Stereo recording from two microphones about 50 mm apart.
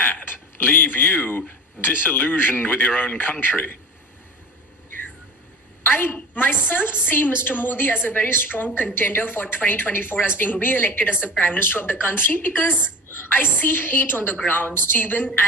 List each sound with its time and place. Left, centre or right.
0.0 s a woman's voice: left
5.8 s a woman's voice: left